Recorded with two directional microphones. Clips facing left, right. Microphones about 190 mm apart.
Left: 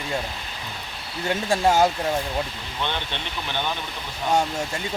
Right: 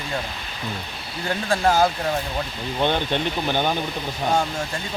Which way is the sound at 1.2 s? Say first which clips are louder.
Even; 25° left (ahead or behind).